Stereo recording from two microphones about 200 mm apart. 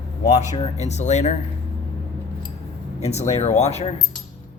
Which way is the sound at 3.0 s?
30° left (ahead or behind).